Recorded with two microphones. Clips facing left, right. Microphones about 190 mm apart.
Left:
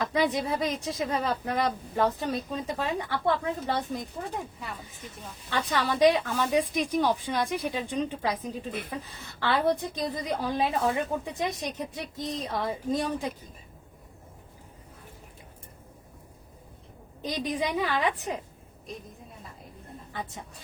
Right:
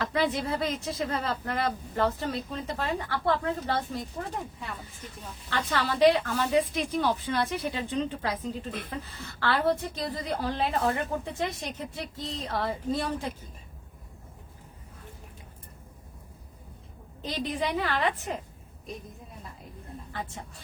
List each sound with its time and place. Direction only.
0.0 s a woman's voice: 15° left (ahead or behind)
5.5 s a woman's voice: 15° left (ahead or behind)
17.2 s a woman's voice: 15° left (ahead or behind)